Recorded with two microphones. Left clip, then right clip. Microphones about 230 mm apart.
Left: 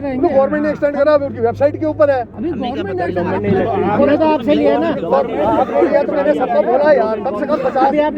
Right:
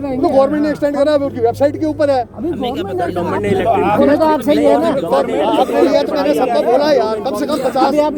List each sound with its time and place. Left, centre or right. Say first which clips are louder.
0.2 s speech: right 1 dB; right
3.7 s speech: right 4 dB; right
4.1 s speech: right 1 dB; right
5.1 s speech: left 1 dB; right